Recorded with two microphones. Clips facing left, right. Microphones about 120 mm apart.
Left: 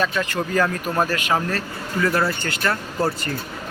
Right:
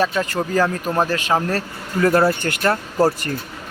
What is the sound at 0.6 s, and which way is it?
Speech, 25° right (ahead or behind).